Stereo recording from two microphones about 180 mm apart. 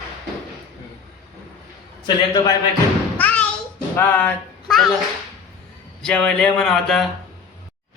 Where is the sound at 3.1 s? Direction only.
10° left (ahead or behind).